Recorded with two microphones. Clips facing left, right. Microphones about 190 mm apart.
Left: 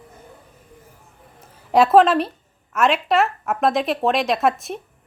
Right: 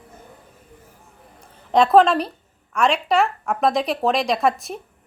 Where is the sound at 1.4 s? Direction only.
5° left (ahead or behind).